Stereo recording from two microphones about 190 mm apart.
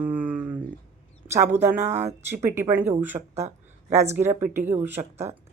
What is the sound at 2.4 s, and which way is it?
Speech, 10° right (ahead or behind).